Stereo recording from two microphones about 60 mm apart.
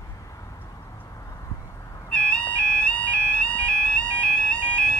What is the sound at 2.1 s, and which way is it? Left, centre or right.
Music, left.